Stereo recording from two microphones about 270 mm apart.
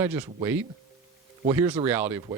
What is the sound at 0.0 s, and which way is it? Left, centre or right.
Speech, centre.